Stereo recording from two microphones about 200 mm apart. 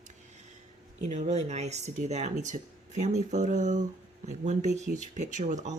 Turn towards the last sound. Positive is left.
turn(degrees=-40)  # may be behind; listen again after turning